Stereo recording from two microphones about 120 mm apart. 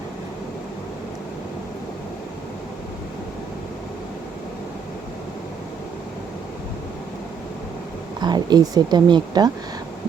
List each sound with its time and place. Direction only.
8.2 s a woman's voice: 35° right (ahead or behind)